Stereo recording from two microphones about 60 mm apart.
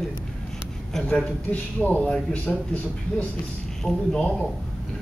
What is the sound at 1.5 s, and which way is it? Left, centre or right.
Speech, left.